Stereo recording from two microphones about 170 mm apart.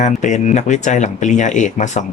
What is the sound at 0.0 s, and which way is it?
Speech, 45° left (ahead or behind).